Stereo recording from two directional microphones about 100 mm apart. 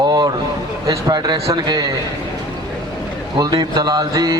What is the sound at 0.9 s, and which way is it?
Speech, 40° right (ahead or behind).